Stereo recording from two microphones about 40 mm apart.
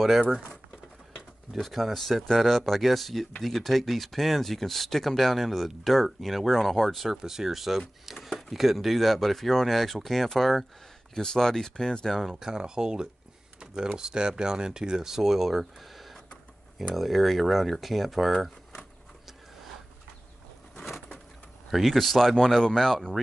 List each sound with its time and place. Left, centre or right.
1.6 s speech: centre
7.2 s speech: centre
12.1 s speech: centre
12.4 s speech: centre
18.3 s a sound: centre
21.6 s speech: centre